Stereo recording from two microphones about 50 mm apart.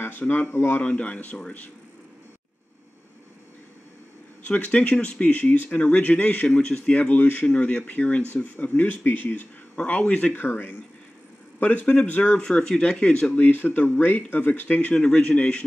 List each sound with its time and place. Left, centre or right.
0.0 s speech: left
0.7 s speech: left
4.4 s speech: left
7.0 s speech: left
7.4 s speech: left
9.8 s speech: left
10.3 s speech: left
11.6 s speech: left
12.4 s speech: centre
13.4 s speech: left
15.0 s speech: left